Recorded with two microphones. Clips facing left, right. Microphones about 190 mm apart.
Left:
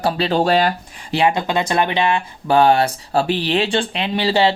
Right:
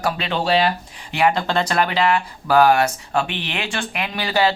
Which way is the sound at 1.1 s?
20° left (ahead or behind).